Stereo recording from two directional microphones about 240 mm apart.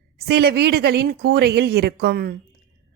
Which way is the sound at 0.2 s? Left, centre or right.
Right.